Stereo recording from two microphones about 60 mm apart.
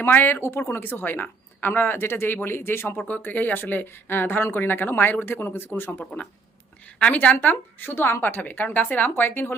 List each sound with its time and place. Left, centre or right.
0.0 s speech: left